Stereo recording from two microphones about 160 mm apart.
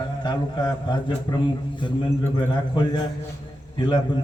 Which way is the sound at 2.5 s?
30° left (ahead or behind).